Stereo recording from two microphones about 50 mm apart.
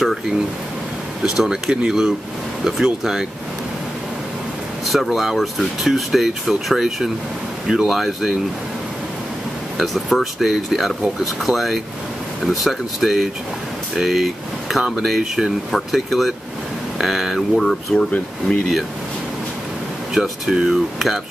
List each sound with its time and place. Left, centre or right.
1.2 s speech: centre
4.8 s speech: centre
10.1 s speech: centre
17.9 s speech: left
20.2 s speech: centre